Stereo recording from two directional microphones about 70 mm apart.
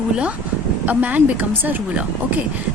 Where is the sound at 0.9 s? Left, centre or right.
Right.